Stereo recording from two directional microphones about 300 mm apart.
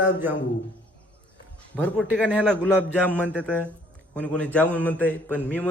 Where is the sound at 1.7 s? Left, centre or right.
Centre.